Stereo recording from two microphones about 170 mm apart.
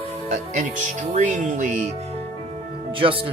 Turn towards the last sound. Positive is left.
turn(degrees=-30)  # may be behind; listen again after turning